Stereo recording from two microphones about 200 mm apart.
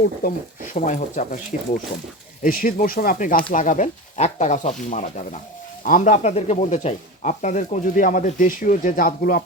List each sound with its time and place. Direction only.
0.2 s speech: 45° left (ahead or behind)